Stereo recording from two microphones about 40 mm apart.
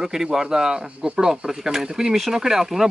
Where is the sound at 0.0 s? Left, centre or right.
Centre.